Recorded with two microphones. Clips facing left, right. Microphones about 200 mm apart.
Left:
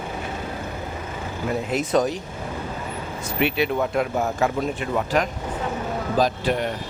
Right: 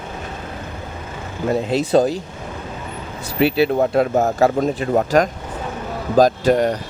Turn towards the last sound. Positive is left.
turn(degrees=-40)  # may be behind; listen again after turning